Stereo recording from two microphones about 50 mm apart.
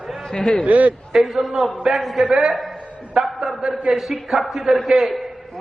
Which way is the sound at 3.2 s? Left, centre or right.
Centre.